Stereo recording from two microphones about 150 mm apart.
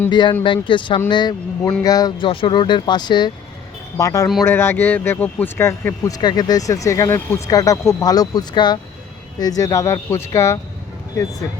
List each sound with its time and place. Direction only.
0.1 s speech: 30° left (ahead or behind)